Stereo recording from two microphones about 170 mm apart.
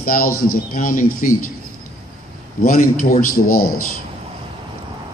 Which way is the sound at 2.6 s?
55° left (ahead or behind).